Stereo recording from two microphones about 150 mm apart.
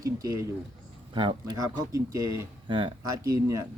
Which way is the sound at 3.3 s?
20° right (ahead or behind).